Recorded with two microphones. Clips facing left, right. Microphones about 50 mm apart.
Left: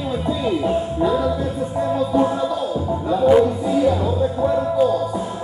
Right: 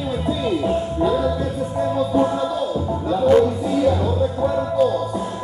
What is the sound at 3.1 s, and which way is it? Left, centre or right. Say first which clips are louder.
Music: left 1 dB; centre.